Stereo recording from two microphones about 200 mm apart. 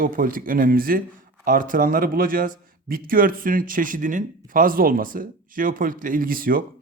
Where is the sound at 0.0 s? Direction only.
45° right (ahead or behind).